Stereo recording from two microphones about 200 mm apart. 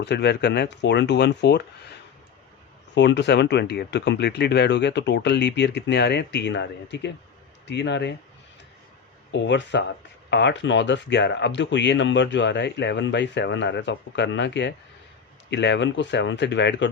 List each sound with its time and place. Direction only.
0.0 s speech: 55° left (ahead or behind)
2.9 s speech: 60° left (ahead or behind)
9.3 s speech: 60° left (ahead or behind)